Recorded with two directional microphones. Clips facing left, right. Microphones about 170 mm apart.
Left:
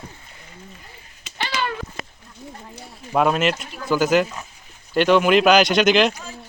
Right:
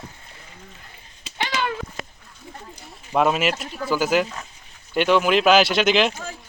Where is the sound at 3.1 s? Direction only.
Centre (ahead or behind).